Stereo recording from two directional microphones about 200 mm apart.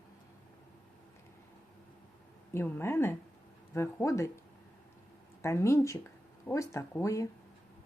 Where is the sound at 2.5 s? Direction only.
10° left (ahead or behind).